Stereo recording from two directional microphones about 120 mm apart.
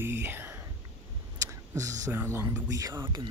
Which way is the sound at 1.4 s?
25° right (ahead or behind).